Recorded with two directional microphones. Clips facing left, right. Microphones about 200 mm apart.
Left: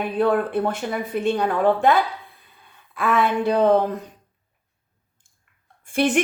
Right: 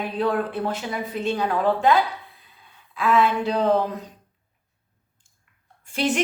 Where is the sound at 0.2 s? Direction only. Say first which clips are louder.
Left 4 dB; 55° left (ahead or behind).